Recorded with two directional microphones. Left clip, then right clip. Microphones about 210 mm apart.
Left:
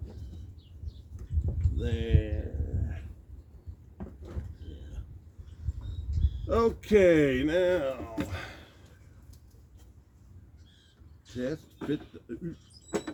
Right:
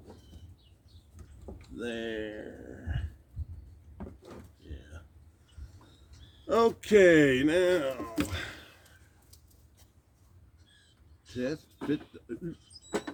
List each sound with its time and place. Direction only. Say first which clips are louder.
1.8 s speech: even; 15° right (ahead or behind)
6.5 s speech: right 1 dB; 25° right (ahead or behind)
11.3 s speech: even; 15° right (ahead or behind)